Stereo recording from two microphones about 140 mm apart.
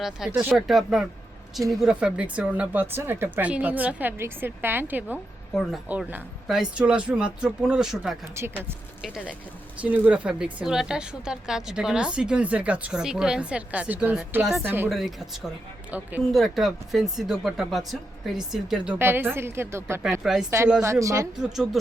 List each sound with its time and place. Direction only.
0.3 s a woman's voice: centre (ahead or behind)
8.4 s a woman's voice: 15° right (ahead or behind)
9.0 s a woman's voice: 5° right (ahead or behind)
14.6 s a woman's voice: 15° right (ahead or behind)
14.8 s speech: centre (ahead or behind)
18.9 s a woman's voice: 15° right (ahead or behind)
20.2 s speech: centre (ahead or behind)
20.8 s speech: 20° right (ahead or behind)
21.3 s speech: centre (ahead or behind)